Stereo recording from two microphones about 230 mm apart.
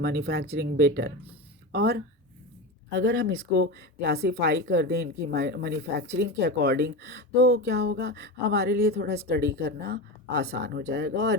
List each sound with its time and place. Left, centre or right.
0.0 s speech: right